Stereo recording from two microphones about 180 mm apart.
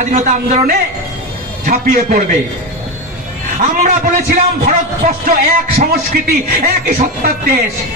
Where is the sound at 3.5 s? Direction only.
45° right (ahead or behind); by 7.6 s 60° right (ahead or behind).